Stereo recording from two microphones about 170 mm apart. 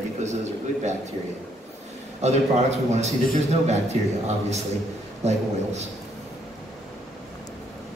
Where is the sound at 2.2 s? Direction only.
40° right (ahead or behind).